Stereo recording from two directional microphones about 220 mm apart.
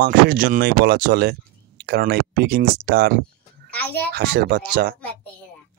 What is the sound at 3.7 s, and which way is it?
Speech, 5° left (ahead or behind).